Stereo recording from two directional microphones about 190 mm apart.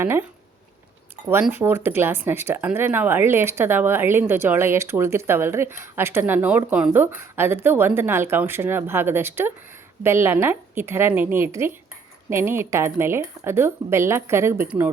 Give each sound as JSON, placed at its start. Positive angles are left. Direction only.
{"t": 0.0, "sound": "speech", "side_deg": -10}